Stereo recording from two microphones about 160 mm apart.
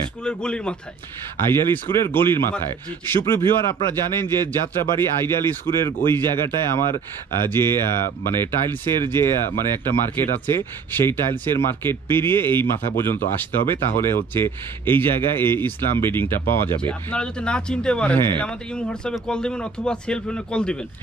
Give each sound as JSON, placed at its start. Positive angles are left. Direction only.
{"t": 0.2, "sound": "a man's voice", "side_deg": 5}